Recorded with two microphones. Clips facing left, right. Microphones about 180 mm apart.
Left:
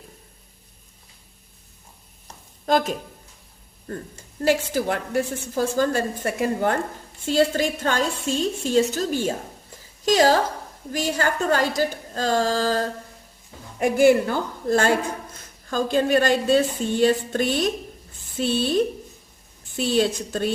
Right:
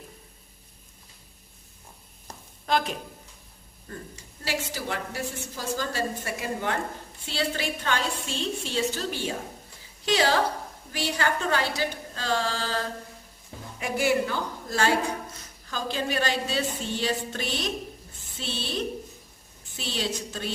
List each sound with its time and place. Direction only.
2.6 s a woman's voice: 40° left (ahead or behind)